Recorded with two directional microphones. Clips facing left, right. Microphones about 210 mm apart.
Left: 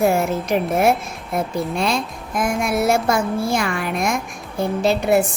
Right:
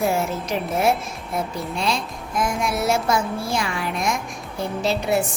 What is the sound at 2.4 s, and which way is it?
A woman's voice, 55° left (ahead or behind).